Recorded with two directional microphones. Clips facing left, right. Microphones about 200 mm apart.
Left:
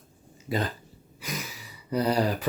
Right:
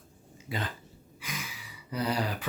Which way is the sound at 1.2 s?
40° left (ahead or behind).